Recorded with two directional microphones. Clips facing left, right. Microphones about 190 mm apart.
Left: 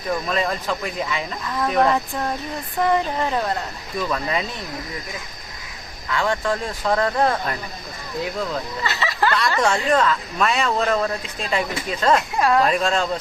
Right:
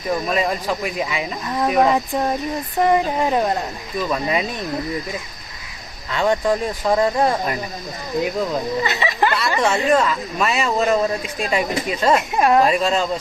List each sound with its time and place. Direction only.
0.3 s speech: 10° right (ahead or behind)
1.5 s speech: 25° right (ahead or behind)
1.7 s speech: 10° right (ahead or behind)
6.1 s speech: 20° right (ahead or behind)
9.6 s speech: 5° right (ahead or behind)
12.6 s speech: 5° right (ahead or behind)